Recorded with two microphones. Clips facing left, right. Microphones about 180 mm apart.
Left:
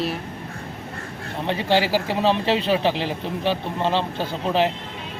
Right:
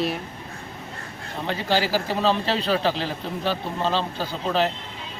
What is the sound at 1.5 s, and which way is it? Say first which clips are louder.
Speech: left 3 dB; 20° left (ahead or behind).